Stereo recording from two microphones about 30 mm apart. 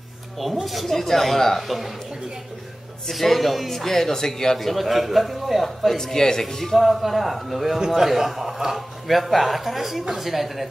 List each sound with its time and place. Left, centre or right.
0.8 s speech: centre
3.1 s speech: centre
4.6 s speech: centre
5.9 s speech: centre
6.4 s speech: centre
6.8 s a man's voice: centre
8.7 s speech: centre